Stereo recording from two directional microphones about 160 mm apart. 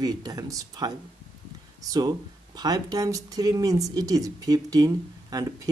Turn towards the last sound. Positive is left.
turn(degrees=-25)  # may be behind; listen again after turning